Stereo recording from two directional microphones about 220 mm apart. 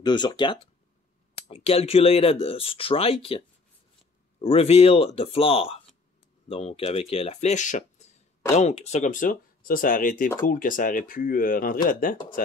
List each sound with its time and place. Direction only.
0.0 s speech: 20° left (ahead or behind); by 12.2 s 40° left (ahead or behind)